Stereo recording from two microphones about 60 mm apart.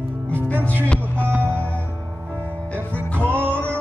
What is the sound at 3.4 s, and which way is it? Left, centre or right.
Music, left.